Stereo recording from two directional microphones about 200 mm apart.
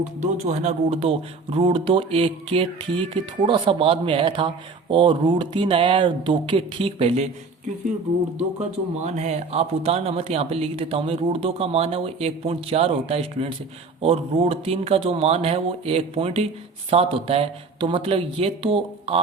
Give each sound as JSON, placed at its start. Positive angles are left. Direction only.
{"t": 0.2, "sound": "speech", "side_deg": -35}
{"t": 9.0, "sound": "speech", "side_deg": -35}